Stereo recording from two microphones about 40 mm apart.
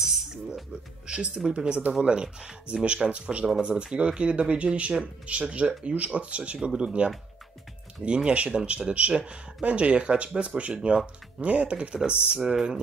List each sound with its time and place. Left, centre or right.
0.0 s music: centre
1.0 s speech: right
12.4 s speech: centre